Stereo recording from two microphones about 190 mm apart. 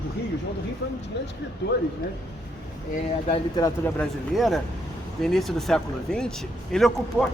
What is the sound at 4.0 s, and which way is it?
Speech, centre (ahead or behind).